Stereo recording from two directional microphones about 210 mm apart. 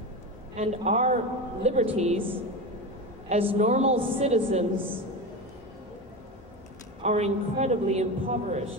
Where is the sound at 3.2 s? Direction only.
30° right (ahead or behind).